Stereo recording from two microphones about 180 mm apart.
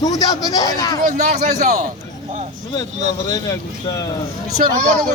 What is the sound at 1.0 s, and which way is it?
Speech, 40° right (ahead or behind).